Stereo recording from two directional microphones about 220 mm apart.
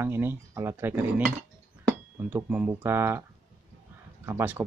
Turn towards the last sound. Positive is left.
turn(degrees=-10)  # may be behind; listen again after turning